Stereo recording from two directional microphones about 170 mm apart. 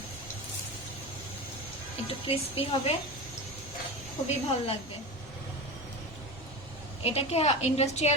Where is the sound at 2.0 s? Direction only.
35° left (ahead or behind).